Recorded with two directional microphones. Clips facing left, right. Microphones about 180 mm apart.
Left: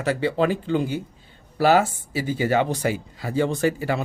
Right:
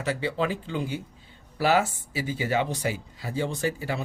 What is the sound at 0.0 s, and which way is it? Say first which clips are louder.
Speech: left 6 dB; 55° left (ahead or behind).